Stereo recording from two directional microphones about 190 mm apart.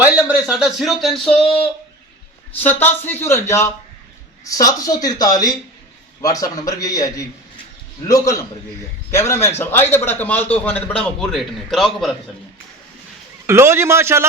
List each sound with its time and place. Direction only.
0.0 s a man's voice: 10° right (ahead or behind)
13.5 s a man's voice: 15° right (ahead or behind)